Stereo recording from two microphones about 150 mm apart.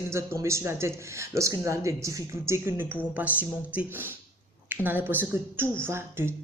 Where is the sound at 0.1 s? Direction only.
15° right (ahead or behind).